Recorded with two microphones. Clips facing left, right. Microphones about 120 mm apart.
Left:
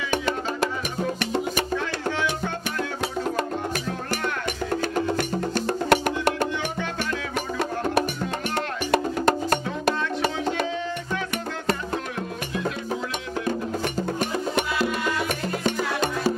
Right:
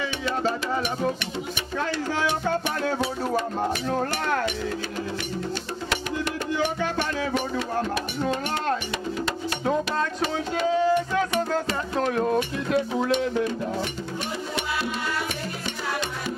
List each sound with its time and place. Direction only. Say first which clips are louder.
5.9 s music: left 7 dB; 55° left (ahead or behind)
7.3 s music: even; 50° left (ahead or behind)
10.7 s music: right 7 dB; 40° right (ahead or behind)
15.6 s music: left 5 dB; 45° left (ahead or behind)